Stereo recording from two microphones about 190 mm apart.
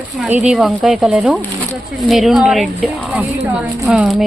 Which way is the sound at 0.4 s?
5° right (ahead or behind).